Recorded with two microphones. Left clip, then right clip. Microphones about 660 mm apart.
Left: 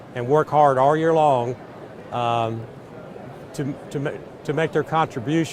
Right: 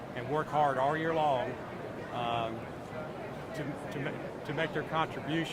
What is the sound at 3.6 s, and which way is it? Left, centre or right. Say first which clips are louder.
Speech: left 12 dB; left.